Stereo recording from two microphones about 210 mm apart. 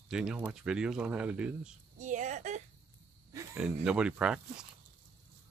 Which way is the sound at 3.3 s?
10° right (ahead or behind).